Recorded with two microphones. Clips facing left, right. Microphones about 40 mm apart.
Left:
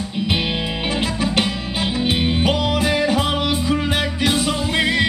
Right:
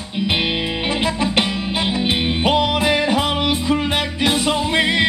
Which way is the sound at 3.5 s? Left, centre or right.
Right.